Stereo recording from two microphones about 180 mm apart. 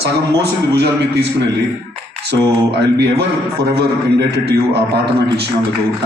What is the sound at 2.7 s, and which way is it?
A man's voice, 65° right (ahead or behind).